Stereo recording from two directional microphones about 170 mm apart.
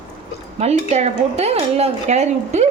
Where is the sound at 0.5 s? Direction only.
40° right (ahead or behind).